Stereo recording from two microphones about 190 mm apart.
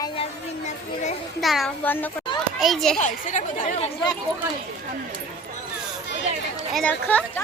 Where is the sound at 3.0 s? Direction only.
40° left (ahead or behind).